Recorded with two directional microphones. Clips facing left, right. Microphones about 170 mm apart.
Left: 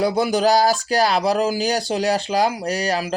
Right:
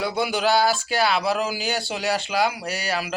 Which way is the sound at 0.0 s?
40° left (ahead or behind).